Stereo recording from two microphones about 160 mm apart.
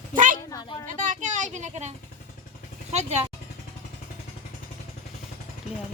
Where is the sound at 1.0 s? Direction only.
50° right (ahead or behind).